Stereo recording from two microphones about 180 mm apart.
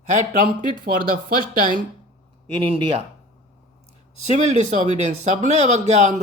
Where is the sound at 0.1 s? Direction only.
45° right (ahead or behind).